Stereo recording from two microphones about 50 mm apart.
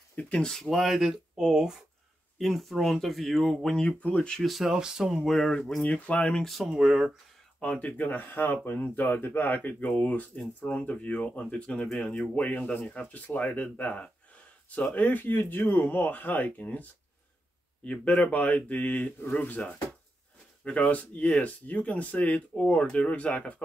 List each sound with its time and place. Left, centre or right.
0.1 s speech: left
0.5 s speech: centre
2.3 s speech: centre
3.8 s speech: left
4.4 s speech: centre
5.2 s speech: centre
5.8 s speech: left
6.4 s speech: centre
7.6 s speech: left
8.0 s speech: left
17.8 s speech: left